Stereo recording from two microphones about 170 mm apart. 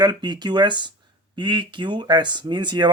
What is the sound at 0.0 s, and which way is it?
Speech, 25° right (ahead or behind).